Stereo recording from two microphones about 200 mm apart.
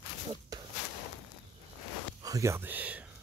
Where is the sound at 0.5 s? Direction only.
20° right (ahead or behind).